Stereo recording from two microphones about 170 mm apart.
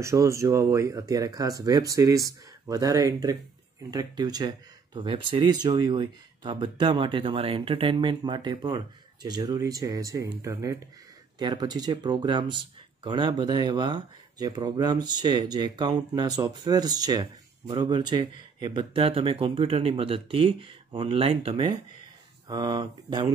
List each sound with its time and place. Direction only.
0.0 s speech: 20° right (ahead or behind); by 21.7 s 35° right (ahead or behind)
22.5 s speech: 25° right (ahead or behind)